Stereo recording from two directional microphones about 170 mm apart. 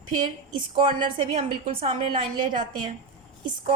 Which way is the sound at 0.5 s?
30° right (ahead or behind).